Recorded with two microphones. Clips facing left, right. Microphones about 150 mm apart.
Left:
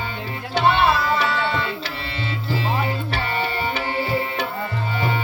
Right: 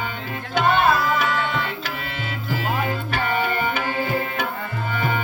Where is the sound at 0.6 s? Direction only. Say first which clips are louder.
Even; 50° right (ahead or behind).